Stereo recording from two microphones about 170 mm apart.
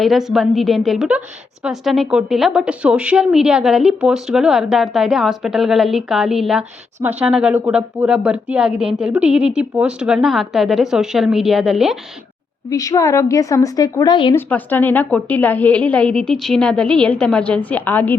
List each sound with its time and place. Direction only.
0.0 s a woman's voice: centre (ahead or behind)
12.7 s a woman's voice: 20° left (ahead or behind)
14.3 s a woman's voice: 10° left (ahead or behind)